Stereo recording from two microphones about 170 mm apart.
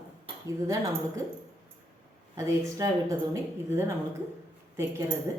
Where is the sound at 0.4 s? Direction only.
20° right (ahead or behind).